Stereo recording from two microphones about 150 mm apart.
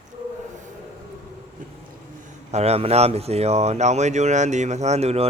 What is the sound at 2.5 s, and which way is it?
Speech, 45° right (ahead or behind).